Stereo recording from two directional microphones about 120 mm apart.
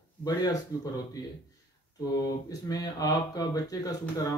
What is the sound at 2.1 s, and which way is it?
Speech, 30° left (ahead or behind).